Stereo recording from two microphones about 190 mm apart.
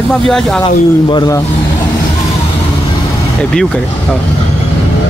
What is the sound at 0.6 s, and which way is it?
Speech, 20° left (ahead or behind).